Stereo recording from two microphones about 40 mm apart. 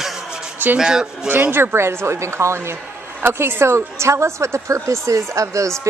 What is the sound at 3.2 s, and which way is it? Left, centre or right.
Speech, right.